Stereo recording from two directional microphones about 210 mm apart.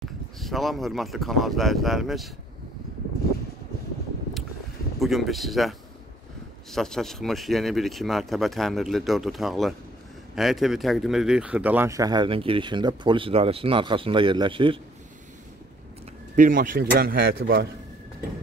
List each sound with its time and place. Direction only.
0.4 s speech: centre (ahead or behind)
4.9 s speech: centre (ahead or behind); by 14.8 s 25° right (ahead or behind)
16.3 s speech: 40° right (ahead or behind)